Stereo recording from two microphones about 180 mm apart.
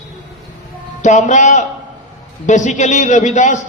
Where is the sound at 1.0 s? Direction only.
40° left (ahead or behind).